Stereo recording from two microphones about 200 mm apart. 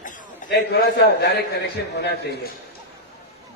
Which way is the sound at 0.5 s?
55° left (ahead or behind).